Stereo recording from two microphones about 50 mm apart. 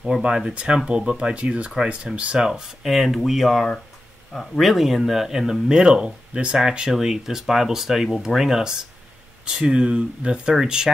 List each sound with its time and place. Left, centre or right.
0.0 s speech: centre